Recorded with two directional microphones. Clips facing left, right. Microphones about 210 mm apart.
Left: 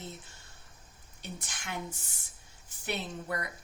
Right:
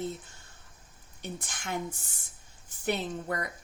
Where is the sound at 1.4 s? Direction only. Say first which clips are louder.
Right 5 dB; 50° right (ahead or behind).